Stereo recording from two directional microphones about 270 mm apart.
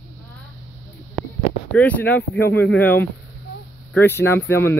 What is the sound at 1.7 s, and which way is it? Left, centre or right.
Speech, centre.